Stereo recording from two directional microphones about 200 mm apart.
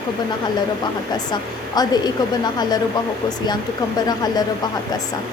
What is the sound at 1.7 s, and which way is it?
Speech, 20° left (ahead or behind).